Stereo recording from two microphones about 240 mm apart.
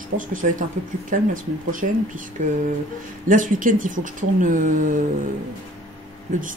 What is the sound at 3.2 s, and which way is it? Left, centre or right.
Speech, right.